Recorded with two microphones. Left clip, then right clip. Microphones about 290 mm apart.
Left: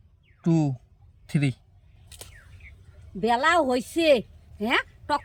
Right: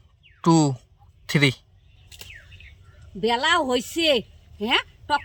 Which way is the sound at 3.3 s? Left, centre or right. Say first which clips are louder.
Even; left.